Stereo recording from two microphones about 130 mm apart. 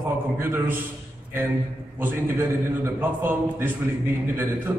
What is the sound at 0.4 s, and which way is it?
Speech, 15° right (ahead or behind).